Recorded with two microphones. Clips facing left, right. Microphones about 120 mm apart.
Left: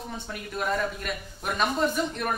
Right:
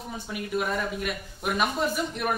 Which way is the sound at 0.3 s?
5° right (ahead or behind).